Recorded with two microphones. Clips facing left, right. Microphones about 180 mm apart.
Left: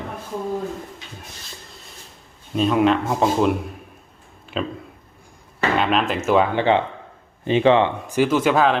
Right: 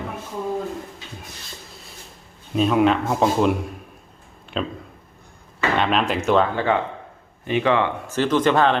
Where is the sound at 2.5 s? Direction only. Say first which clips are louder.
Even; centre (ahead or behind).